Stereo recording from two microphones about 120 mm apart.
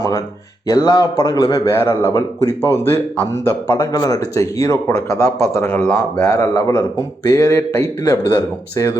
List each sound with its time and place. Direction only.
0.7 s a man's voice: 30° left (ahead or behind); by 3.8 s 15° left (ahead or behind)
3.8 s a man's voice: 30° left (ahead or behind)